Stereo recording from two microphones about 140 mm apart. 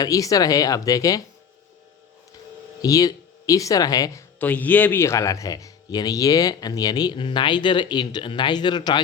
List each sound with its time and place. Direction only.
0.0 s speech: 25° left (ahead or behind)
2.8 s speech: 25° left (ahead or behind)
4.4 s speech: 10° left (ahead or behind); by 9.0 s 30° left (ahead or behind)